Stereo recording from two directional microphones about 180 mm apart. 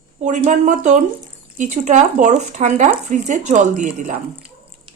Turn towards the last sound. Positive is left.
turn(degrees=-45)  # may be behind; listen again after turning